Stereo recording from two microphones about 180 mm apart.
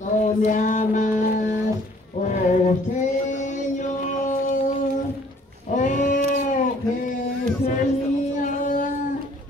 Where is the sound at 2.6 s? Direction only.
45° left (ahead or behind).